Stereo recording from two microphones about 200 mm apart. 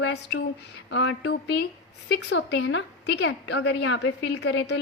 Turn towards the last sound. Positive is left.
turn(degrees=65)  # may be behind; listen again after turning